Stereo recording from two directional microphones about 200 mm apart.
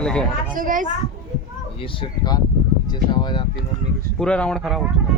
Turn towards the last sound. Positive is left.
turn(degrees=0)  # may be behind; listen again after turning